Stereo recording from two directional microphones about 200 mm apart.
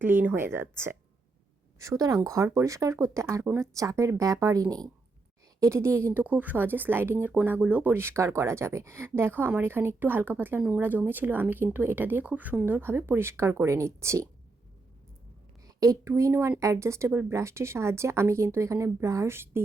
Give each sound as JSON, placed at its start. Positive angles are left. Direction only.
{"t": 0.0, "sound": "speech", "side_deg": -10}
{"t": 15.6, "sound": "speech", "side_deg": -15}